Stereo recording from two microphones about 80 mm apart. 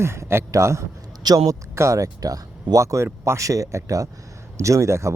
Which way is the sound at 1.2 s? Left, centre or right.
Right.